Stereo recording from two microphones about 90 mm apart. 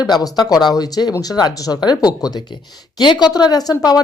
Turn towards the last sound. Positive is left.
turn(degrees=45)  # may be behind; listen again after turning